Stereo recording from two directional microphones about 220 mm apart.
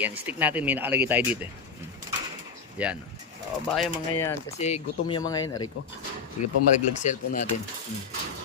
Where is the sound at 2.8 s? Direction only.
5° right (ahead or behind).